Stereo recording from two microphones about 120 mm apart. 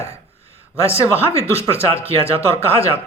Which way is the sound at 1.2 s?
55° right (ahead or behind).